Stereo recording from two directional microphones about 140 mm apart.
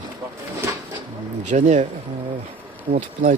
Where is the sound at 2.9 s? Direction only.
70° right (ahead or behind).